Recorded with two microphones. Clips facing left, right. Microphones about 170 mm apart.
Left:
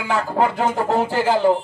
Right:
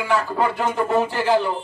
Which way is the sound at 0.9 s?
90° left.